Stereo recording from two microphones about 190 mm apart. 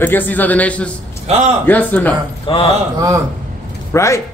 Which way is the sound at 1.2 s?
35° right (ahead or behind).